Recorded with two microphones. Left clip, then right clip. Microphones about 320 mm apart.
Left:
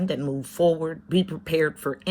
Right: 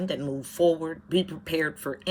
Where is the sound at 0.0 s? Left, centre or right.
Centre.